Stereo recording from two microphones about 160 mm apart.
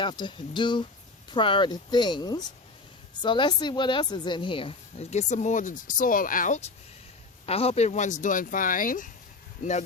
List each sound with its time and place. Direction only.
0.0 s speech: 30° left (ahead or behind); by 6.7 s 50° left (ahead or behind)
7.4 s speech: 40° left (ahead or behind); by 9.0 s 60° left (ahead or behind)